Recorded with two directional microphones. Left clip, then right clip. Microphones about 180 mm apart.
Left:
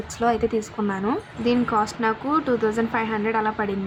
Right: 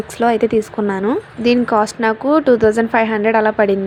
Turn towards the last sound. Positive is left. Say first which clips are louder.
# right 10 dB
turn(degrees=-35)  # may be behind; listen again after turning